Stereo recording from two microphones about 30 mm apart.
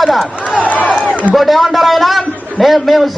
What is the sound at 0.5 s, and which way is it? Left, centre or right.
Speech, left.